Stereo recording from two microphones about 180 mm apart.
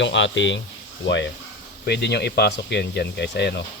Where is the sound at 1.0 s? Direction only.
80° left.